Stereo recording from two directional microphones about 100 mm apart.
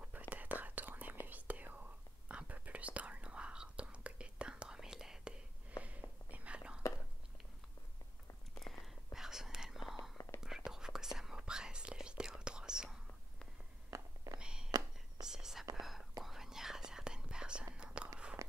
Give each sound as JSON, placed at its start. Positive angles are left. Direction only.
{"t": 0.3, "sound": "whispering", "side_deg": -15}
{"t": 8.5, "sound": "whispering", "side_deg": 0}
{"t": 13.8, "sound": "whispering", "side_deg": -30}
{"t": 14.4, "sound": "a sound", "side_deg": -10}
{"t": 15.2, "sound": "whispering", "side_deg": -5}
{"t": 18.4, "sound": "a sound", "side_deg": -30}